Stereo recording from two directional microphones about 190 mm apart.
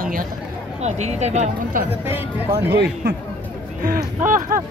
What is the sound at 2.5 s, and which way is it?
Speech, 60° right (ahead or behind).